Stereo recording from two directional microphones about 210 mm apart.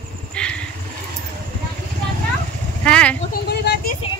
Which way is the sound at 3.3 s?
45° left (ahead or behind).